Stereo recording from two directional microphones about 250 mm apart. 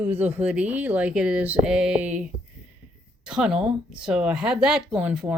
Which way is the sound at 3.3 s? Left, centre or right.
Centre.